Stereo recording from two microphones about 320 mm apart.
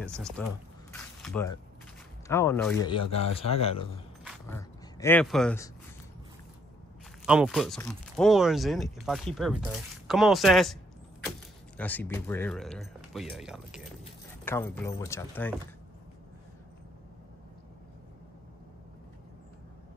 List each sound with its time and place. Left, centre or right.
0.0 s speech: centre
7.2 s speech: centre